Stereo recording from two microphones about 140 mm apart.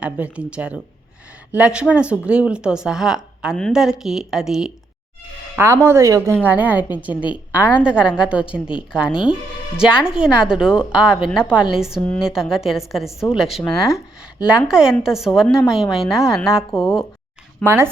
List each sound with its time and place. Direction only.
0.0 s a woman's voice: 10° right (ahead or behind)
5.5 s a woman's voice: 20° right (ahead or behind); by 17.8 s 5° left (ahead or behind)